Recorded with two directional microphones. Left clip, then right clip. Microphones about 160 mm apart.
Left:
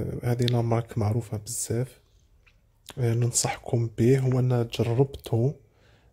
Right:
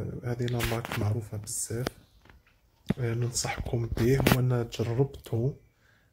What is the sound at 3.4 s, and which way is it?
Speech, 55° left (ahead or behind).